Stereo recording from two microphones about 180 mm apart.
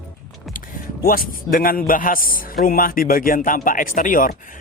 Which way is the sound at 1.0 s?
50° left (ahead or behind).